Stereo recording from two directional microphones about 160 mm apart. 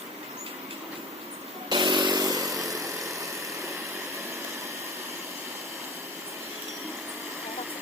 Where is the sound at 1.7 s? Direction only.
30° right (ahead or behind).